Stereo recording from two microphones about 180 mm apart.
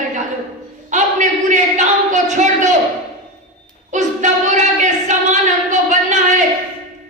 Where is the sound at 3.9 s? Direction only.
45° right (ahead or behind).